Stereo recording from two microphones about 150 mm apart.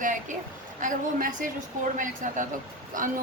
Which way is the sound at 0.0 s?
60° right (ahead or behind).